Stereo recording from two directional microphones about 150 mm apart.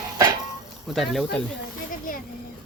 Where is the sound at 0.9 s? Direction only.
Centre (ahead or behind).